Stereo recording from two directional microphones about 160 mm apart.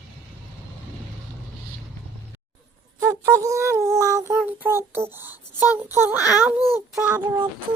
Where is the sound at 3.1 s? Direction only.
20° right (ahead or behind).